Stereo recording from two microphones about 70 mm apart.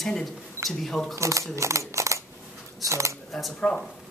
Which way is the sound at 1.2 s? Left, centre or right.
Right.